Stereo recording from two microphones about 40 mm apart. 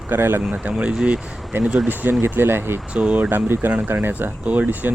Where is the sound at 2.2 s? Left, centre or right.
Right.